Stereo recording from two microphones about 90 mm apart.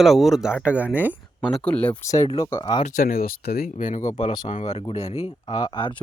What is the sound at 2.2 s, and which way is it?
Speech, 60° left (ahead or behind).